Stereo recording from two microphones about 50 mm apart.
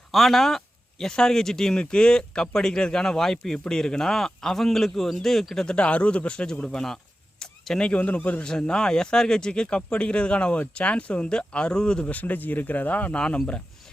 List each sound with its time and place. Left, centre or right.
0.1 s speech: centre
5.6 s speech: left
7.9 s speech: left
8.4 s speech: centre
12.1 s speech: left; by 13.4 s centre